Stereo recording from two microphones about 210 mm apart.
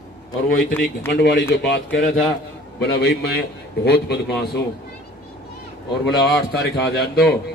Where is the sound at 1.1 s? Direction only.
55° left (ahead or behind).